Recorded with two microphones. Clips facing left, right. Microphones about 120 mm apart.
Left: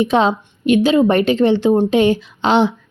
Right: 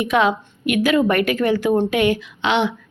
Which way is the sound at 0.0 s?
30° left (ahead or behind).